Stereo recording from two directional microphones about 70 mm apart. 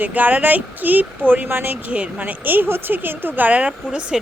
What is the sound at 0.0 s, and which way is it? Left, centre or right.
Speech, right.